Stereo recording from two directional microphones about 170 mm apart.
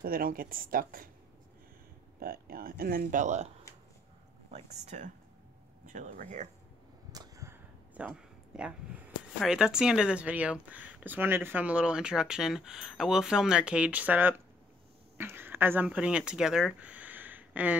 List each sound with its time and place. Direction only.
0.0 s speech: 60° right (ahead or behind)
2.1 s speech: 60° right (ahead or behind); by 3.4 s 45° right (ahead or behind)
4.5 s speech: 40° right (ahead or behind)
7.1 s arrow: 20° right (ahead or behind)
8.1 s speech: 5° right (ahead or behind)